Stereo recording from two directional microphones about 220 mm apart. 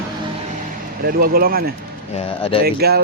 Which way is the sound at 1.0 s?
45° right (ahead or behind).